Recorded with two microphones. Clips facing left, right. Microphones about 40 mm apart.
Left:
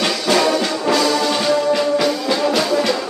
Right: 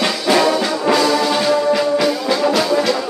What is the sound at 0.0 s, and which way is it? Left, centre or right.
Music, centre.